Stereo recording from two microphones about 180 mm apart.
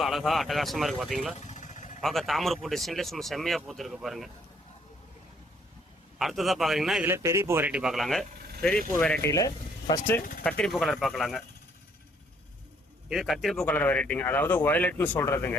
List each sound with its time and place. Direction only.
0.0 s speech: centre (ahead or behind)
1.4 s vehicle: 40° left (ahead or behind)
2.0 s speech: centre (ahead or behind)
6.1 s speech: centre (ahead or behind)
7.1 s speech: 15° right (ahead or behind); by 9.3 s 5° left (ahead or behind)
9.3 s speech: 20° left (ahead or behind)
10.2 s speech: 55° left (ahead or behind)
10.4 s speech: centre (ahead or behind)
13.1 s speech: centre (ahead or behind)